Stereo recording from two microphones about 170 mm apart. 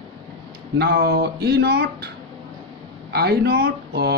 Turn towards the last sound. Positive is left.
turn(degrees=-70)  # may be behind; listen again after turning